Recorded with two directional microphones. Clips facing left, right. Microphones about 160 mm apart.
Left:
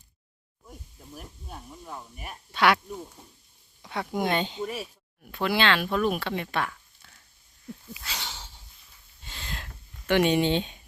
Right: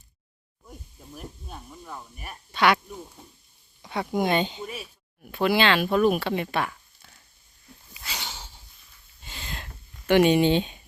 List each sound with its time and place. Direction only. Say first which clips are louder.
1.1 s sizzle: right 2 dB; 10° left (ahead or behind)
2.5 s speech: right 1 dB; centre (ahead or behind)
3.8 s speech: right 3 dB; centre (ahead or behind)
4.6 s speech: left 4 dB; 40° left (ahead or behind)
5.2 s speech: right 3 dB; 5° right (ahead or behind)
7.9 s a sound: right 6 dB; centre (ahead or behind)
10.1 s speech: right 4 dB; 5° right (ahead or behind)